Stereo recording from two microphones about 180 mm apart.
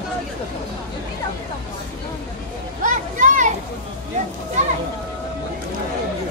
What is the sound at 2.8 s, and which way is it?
Vehicle, 45° right (ahead or behind).